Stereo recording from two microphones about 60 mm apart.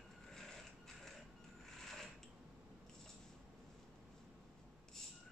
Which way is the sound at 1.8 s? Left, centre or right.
Centre.